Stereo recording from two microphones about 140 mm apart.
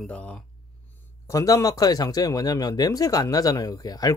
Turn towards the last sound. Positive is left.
turn(degrees=25)  # may be behind; listen again after turning